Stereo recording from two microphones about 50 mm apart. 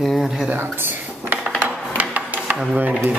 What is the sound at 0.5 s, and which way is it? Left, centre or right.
Speech, right.